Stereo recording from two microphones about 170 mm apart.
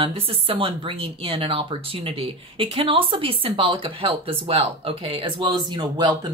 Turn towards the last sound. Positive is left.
turn(degrees=-25)  # may be behind; listen again after turning